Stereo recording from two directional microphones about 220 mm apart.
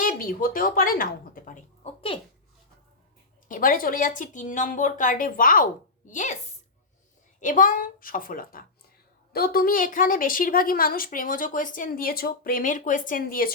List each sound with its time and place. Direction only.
0.0 s music: 40° left (ahead or behind)
3.5 s a woman's voice: 40° left (ahead or behind)
7.4 s a woman's voice: 35° left (ahead or behind)